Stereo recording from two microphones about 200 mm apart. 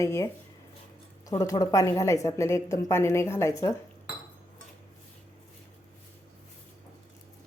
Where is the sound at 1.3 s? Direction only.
15° left (ahead or behind).